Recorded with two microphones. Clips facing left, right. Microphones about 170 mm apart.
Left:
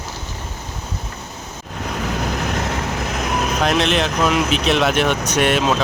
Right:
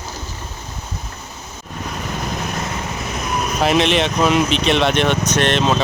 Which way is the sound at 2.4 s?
75° left (ahead or behind).